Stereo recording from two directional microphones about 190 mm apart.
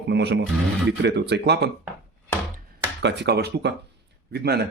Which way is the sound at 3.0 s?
65° right (ahead or behind).